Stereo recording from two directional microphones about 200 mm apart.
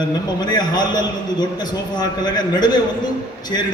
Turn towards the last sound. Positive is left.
turn(degrees=20)  # may be behind; listen again after turning